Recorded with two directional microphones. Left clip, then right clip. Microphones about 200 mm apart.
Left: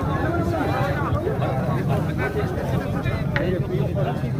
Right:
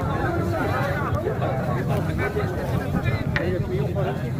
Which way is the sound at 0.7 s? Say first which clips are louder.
Left 1 dB; 55° left (ahead or behind).